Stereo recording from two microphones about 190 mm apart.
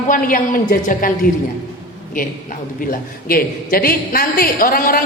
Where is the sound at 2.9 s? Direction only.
50° left (ahead or behind).